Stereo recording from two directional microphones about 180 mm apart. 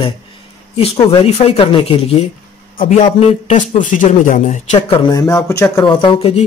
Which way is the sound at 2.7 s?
50° left (ahead or behind).